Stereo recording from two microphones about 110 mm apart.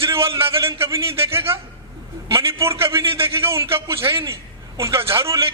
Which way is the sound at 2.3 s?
25° right (ahead or behind).